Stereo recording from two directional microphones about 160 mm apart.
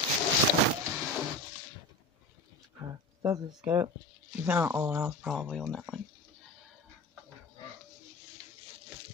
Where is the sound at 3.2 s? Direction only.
20° right (ahead or behind).